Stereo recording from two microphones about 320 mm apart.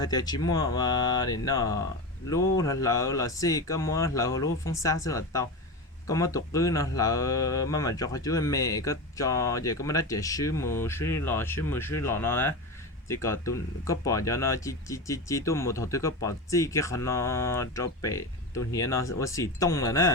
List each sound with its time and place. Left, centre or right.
0.0 s speech: centre